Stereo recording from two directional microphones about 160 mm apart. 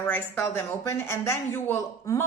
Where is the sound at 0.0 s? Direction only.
15° left (ahead or behind).